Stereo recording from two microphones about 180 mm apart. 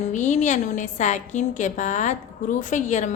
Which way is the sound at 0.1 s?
40° left (ahead or behind).